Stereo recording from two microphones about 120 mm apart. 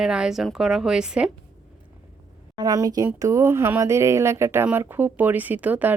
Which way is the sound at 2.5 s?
30° right (ahead or behind).